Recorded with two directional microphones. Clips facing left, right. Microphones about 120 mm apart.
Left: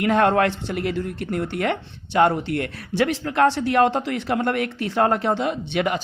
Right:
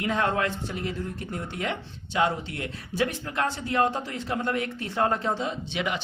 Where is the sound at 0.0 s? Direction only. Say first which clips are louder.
Left 8 dB; 65° left (ahead or behind).